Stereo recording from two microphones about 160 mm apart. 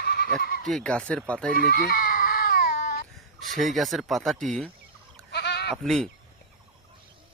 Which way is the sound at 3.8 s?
Centre (ahead or behind).